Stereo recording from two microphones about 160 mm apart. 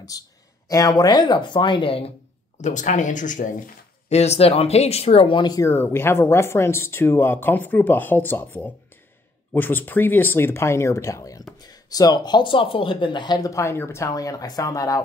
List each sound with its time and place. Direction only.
0.1 s speech: 25° left (ahead or behind)
2.6 s speech: 50° left (ahead or behind)
4.2 s speech: 40° left (ahead or behind); by 15.0 s 20° left (ahead or behind)